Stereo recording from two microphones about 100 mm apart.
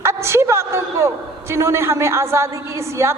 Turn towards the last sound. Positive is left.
turn(degrees=-25)  # may be behind; listen again after turning